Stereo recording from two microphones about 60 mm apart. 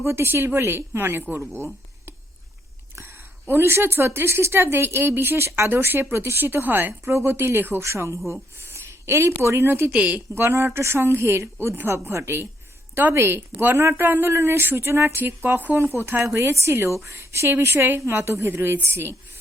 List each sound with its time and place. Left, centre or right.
0.0 s a woman's voice: right
3.5 s a woman's voice: right
7.0 s a woman's voice: right
7.8 s a woman's voice: right
9.9 s a woman's voice: centre
10.2 s a woman's voice: right
15.4 s speech: right
15.9 s a woman's voice: right